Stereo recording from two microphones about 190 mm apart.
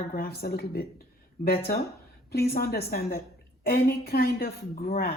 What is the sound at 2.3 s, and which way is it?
A woman's voice, 55° left (ahead or behind).